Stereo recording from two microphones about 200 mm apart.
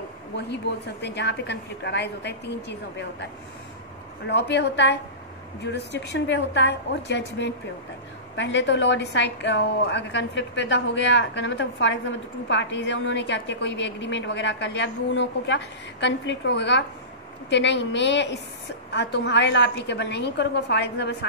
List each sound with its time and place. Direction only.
0.5 s a woman's voice: 55° left (ahead or behind)
4.3 s a woman's voice: 55° left (ahead or behind)